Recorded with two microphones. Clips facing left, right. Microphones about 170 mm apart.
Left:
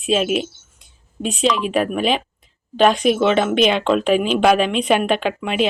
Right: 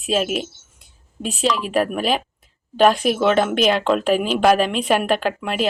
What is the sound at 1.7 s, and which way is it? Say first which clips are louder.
A woman's voice: left 1 dB; 5° right (ahead or behind).